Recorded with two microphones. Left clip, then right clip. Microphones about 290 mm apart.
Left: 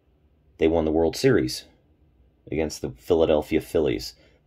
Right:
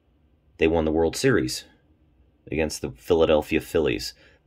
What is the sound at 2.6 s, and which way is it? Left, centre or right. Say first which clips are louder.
Speech: right 1 dB; centre.